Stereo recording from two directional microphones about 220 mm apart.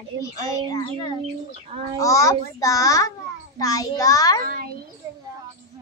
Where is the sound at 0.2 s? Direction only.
15° left (ahead or behind).